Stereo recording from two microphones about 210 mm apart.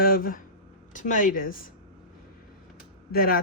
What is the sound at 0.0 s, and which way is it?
Speech, 45° left (ahead or behind).